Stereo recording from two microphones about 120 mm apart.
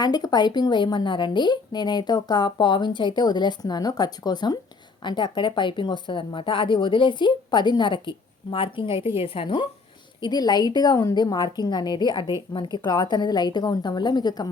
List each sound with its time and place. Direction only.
0.0 s speech: 35° left (ahead or behind)